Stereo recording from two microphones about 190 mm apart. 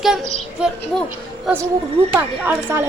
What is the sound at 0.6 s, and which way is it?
Speech, 5° right (ahead or behind).